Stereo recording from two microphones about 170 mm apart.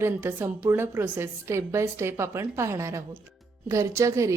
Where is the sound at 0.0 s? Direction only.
10° right (ahead or behind).